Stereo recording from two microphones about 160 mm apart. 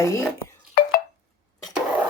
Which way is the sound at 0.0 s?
15° left (ahead or behind).